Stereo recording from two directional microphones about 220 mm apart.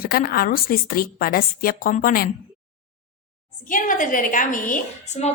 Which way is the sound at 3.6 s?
35° left (ahead or behind).